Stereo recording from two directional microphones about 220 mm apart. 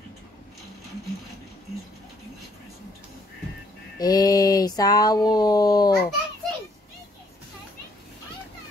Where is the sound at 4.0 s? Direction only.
15° left (ahead or behind).